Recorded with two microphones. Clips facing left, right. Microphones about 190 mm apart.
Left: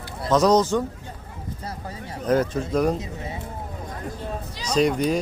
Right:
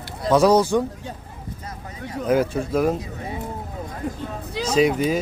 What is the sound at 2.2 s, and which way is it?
Speech, 10° right (ahead or behind).